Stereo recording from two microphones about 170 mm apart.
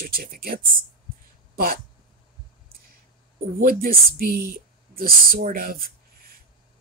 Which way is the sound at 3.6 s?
60° right (ahead or behind).